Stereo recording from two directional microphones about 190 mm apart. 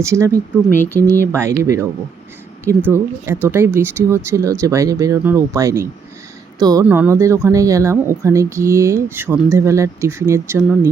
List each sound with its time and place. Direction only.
0.0 s speech: 15° right (ahead or behind)
0.9 s speech: 10° left (ahead or behind)
1.4 s speech: 15° right (ahead or behind)
6.8 s speech: 10° right (ahead or behind)